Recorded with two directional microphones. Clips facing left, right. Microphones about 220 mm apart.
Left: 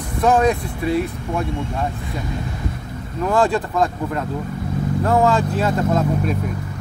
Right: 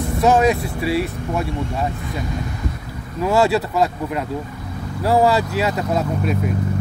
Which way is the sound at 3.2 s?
5° right (ahead or behind).